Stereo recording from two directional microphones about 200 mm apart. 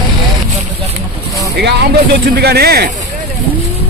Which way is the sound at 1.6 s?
55° right (ahead or behind).